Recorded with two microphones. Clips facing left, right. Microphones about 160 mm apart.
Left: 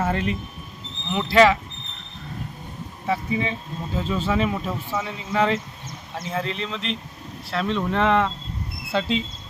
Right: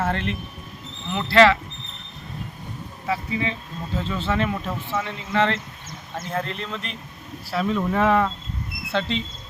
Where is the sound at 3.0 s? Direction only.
25° left (ahead or behind).